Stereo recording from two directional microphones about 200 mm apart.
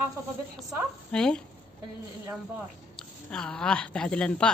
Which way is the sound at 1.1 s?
5° left (ahead or behind).